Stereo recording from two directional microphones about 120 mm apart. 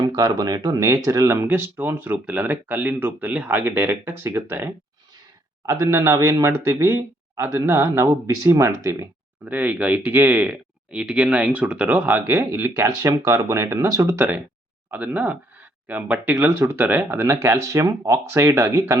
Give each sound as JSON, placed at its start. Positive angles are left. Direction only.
{"t": 0.0, "sound": "speech", "side_deg": -35}
{"t": 14.8, "sound": "speech", "side_deg": -10}